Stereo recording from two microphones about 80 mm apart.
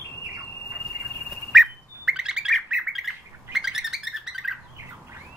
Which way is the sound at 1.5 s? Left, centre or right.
Centre.